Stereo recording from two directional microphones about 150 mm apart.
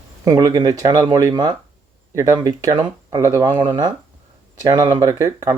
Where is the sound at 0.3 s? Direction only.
25° right (ahead or behind).